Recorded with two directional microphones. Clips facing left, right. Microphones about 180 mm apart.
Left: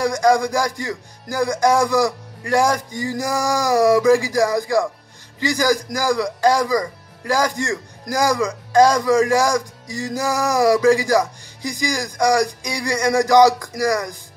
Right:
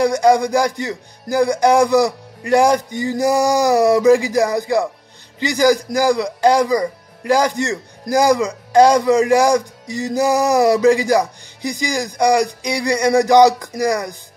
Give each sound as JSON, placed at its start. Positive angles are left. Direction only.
{"t": 0.0, "sound": "a man's voice", "side_deg": -20}